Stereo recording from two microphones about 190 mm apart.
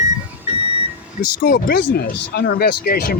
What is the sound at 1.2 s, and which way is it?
Speech, 50° left (ahead or behind).